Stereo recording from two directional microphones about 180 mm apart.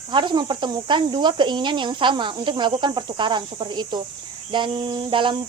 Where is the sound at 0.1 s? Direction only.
25° right (ahead or behind).